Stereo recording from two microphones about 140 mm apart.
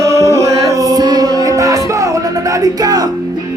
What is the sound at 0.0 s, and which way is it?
Music, 20° right (ahead or behind).